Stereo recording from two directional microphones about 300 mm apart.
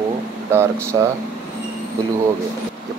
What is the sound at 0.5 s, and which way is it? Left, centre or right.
Speech, centre.